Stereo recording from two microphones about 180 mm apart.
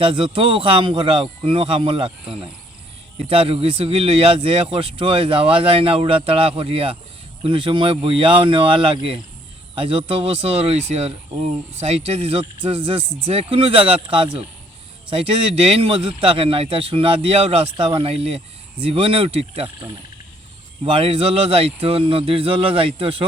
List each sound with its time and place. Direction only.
0.0 s speech: 30° right (ahead or behind)
3.2 s speech: 30° right (ahead or behind)
15.6 s speech: 30° right (ahead or behind)
20.8 s speech: 30° right (ahead or behind)